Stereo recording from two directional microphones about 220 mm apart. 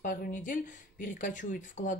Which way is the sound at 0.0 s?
35° left (ahead or behind).